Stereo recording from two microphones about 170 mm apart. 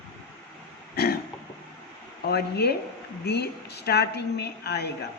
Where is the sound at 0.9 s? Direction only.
70° left (ahead or behind).